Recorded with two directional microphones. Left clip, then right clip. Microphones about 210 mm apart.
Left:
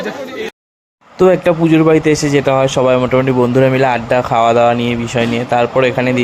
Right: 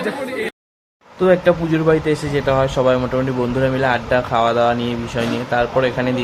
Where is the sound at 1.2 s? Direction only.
25° left (ahead or behind).